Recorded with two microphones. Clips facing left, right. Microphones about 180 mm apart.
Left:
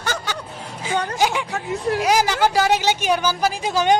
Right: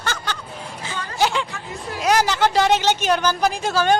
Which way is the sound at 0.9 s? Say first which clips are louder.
Left 11 dB; 70° left (ahead or behind).